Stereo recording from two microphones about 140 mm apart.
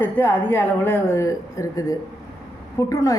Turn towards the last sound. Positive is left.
turn(degrees=20)  # may be behind; listen again after turning